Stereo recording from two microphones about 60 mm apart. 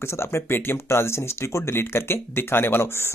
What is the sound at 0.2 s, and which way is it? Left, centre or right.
Speech, left.